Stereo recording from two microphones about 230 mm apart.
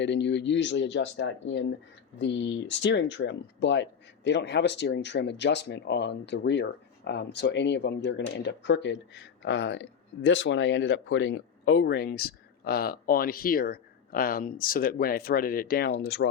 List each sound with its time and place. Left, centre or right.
0.0 s speech: left